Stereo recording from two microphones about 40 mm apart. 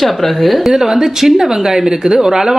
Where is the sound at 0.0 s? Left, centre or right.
Centre.